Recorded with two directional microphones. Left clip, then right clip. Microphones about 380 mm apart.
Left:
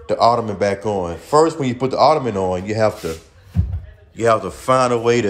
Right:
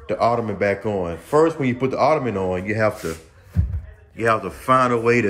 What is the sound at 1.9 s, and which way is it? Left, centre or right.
A man's voice, centre.